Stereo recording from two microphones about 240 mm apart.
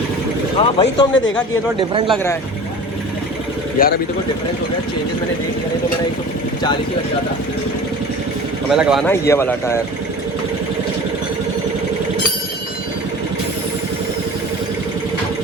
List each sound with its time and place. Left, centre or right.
0.6 s speech: centre
1.8 s speech: right
3.8 s speech: left
8.7 s speech: centre
9.2 s speech: centre